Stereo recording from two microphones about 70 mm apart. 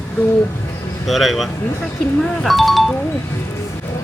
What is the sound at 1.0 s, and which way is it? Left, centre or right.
Speech, centre.